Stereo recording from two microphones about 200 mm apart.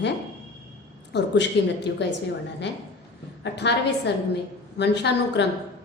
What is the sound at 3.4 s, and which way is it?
Speech, 60° left (ahead or behind).